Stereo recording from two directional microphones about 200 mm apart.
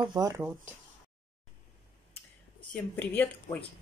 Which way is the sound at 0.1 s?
15° right (ahead or behind).